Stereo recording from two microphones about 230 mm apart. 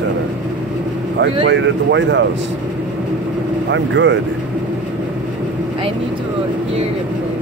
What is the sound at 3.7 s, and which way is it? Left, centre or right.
Speech, right.